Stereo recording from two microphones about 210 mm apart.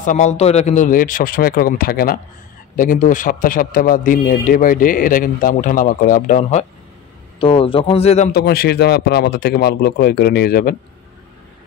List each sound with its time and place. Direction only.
0.0 s a man's voice: 35° left (ahead or behind)
7.3 s a man's voice: 25° left (ahead or behind)
8.3 s speech: 50° left (ahead or behind)